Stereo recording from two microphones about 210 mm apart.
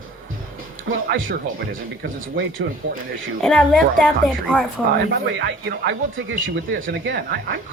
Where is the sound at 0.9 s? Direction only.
50° right (ahead or behind).